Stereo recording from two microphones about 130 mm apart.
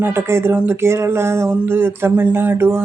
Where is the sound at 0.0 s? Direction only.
20° right (ahead or behind).